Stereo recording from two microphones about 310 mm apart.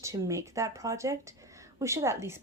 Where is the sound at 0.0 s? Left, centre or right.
Centre.